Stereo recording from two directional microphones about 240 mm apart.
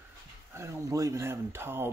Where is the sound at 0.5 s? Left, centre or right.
Centre.